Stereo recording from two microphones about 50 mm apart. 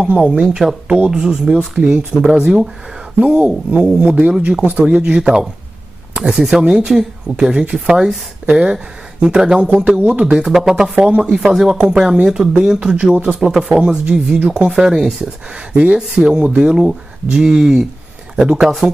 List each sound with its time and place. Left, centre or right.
0.0 s speech: right
5.2 s speech: centre; by 10.3 s right
10.3 s speech: centre
11.1 s speech: right